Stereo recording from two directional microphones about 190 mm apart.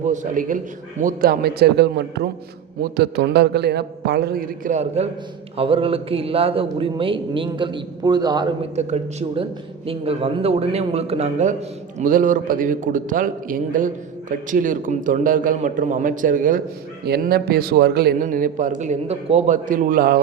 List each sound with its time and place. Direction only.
0.0 s a man's voice: 40° right (ahead or behind); by 8.4 s 20° right (ahead or behind)
8.7 s a man's voice: 35° right (ahead or behind)